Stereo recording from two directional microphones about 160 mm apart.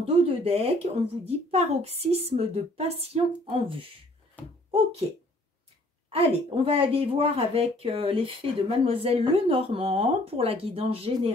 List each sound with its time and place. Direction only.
0.0 s speech: 40° right (ahead or behind)
6.0 s speech: 35° right (ahead or behind)